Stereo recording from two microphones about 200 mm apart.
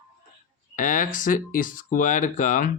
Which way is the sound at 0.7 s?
40° left (ahead or behind).